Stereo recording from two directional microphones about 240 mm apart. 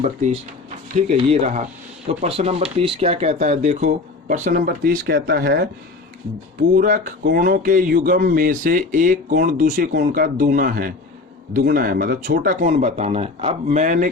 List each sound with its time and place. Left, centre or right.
0.9 s speech: right
6.7 s speech: right